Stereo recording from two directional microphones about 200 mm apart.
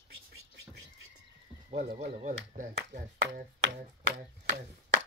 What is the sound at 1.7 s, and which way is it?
Speech, 35° right (ahead or behind).